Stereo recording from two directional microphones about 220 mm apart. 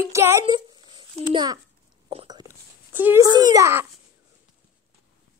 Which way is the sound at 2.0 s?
20° right (ahead or behind).